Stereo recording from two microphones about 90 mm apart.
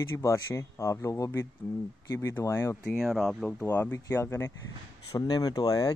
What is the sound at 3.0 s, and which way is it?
Speech, centre (ahead or behind).